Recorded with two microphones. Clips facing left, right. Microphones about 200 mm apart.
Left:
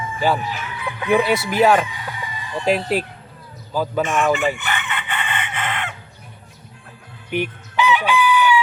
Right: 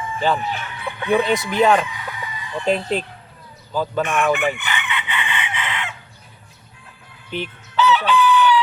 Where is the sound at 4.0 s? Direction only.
60° right (ahead or behind).